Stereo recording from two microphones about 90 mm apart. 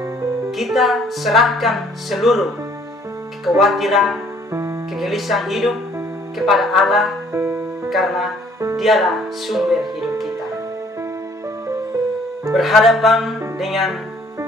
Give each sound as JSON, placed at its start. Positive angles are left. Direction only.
{"t": 0.5, "sound": "music", "side_deg": 0}
{"t": 4.5, "sound": "music", "side_deg": -35}
{"t": 4.9, "sound": "music", "side_deg": 0}
{"t": 7.3, "sound": "music", "side_deg": -25}
{"t": 7.9, "sound": "music", "side_deg": 0}
{"t": 8.7, "sound": "speech", "side_deg": 0}
{"t": 12.5, "sound": "music", "side_deg": 0}